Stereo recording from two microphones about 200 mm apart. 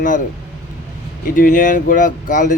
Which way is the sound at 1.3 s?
40° left (ahead or behind).